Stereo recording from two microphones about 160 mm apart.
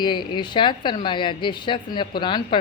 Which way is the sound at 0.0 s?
30° left (ahead or behind).